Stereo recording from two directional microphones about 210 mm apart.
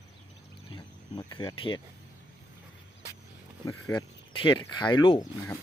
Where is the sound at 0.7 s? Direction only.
20° left (ahead or behind).